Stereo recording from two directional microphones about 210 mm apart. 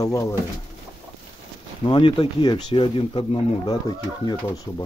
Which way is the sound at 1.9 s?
25° left (ahead or behind).